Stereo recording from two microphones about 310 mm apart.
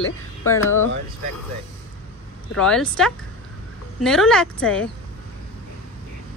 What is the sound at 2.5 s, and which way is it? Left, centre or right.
A woman's voice, centre.